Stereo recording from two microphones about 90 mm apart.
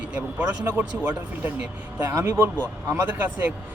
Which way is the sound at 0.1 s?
20° right (ahead or behind).